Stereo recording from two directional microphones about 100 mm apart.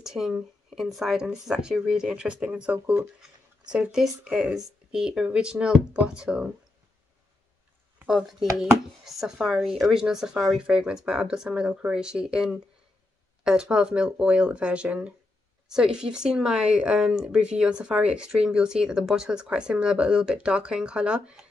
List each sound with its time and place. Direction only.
0.0 s speech: 5° right (ahead or behind)
8.1 s speech: 5° right (ahead or behind)